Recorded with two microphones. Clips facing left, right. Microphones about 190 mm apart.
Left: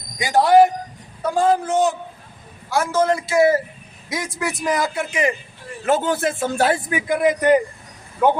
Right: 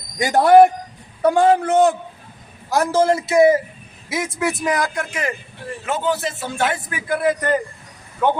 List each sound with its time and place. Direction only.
0.2 s a man's voice: 55° right (ahead or behind)
1.3 s a man's voice: 70° right (ahead or behind)
2.6 s a man's voice: 35° right (ahead or behind); by 3.6 s 20° right (ahead or behind)
4.1 s a man's voice: centre (ahead or behind)
5.8 s a man's voice: 45° left (ahead or behind); by 7.6 s 15° left (ahead or behind)